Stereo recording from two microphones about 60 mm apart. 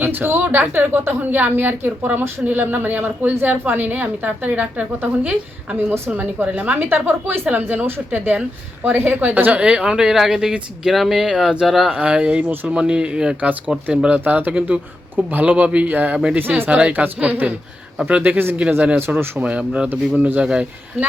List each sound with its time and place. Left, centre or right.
0.0 s a woman's voice: right; by 11.9 s centre
11.9 s speech: centre
16.4 s a woman's voice: right
16.6 s speech: right
18.6 s speech: centre